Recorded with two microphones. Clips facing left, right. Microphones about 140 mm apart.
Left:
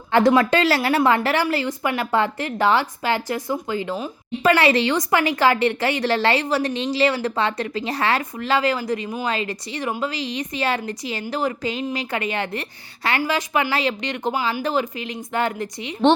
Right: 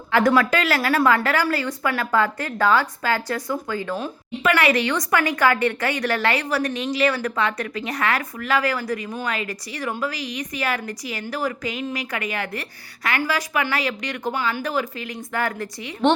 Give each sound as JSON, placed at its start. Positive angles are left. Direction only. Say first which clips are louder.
{"t": 0.1, "sound": "a woman's voice", "louder": "left 2 dB", "side_deg": 25}
{"t": 4.4, "sound": "a woman's voice", "louder": "left 2 dB", "side_deg": 30}